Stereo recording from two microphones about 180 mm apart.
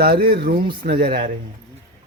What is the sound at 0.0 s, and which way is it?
Speech, 60° right (ahead or behind).